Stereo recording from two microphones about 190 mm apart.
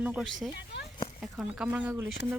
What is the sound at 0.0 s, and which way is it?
Speech, 5° right (ahead or behind).